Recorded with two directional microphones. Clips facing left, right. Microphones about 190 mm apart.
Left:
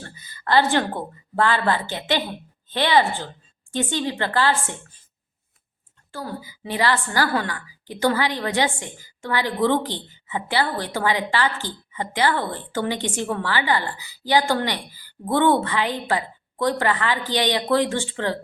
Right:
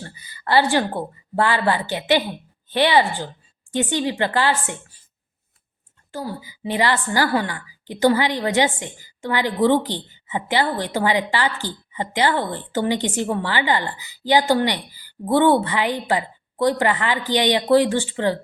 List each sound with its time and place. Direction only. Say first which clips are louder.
0.0 s a woman's voice: right 1 dB; 15° right (ahead or behind)
6.1 s a woman's voice: right 2 dB; 15° right (ahead or behind)